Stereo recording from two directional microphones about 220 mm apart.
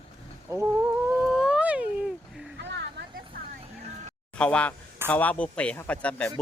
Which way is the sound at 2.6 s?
55° right (ahead or behind).